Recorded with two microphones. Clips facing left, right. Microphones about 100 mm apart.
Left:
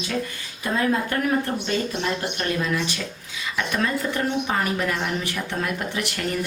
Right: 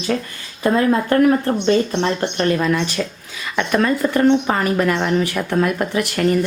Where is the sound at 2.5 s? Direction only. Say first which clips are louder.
Right 7 dB; 60° right (ahead or behind).